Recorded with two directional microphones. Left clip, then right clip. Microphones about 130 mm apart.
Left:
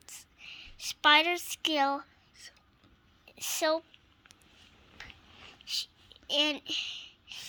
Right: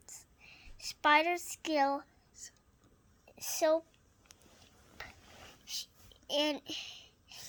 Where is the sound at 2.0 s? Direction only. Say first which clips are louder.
Left 3 dB; 25° left (ahead or behind).